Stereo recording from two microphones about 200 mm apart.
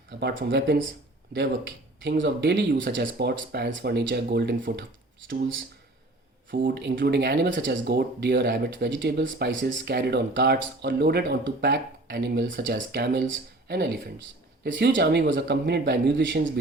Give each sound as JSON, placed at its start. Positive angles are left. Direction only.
{"t": 0.2, "sound": "speech", "side_deg": -55}
{"t": 2.0, "sound": "speech", "side_deg": -60}
{"t": 6.6, "sound": "speech", "side_deg": -50}